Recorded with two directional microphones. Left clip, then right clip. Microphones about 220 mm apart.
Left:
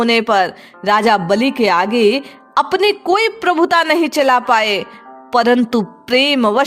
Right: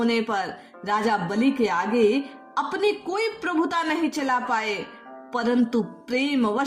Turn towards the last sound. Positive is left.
turn(degrees=45)  # may be behind; listen again after turning